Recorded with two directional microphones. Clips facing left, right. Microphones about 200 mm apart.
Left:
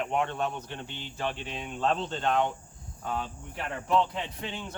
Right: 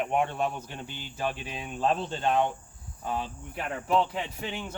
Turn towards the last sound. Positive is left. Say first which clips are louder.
# right 2 dB
turn(degrees=-15)  # may be behind; listen again after turning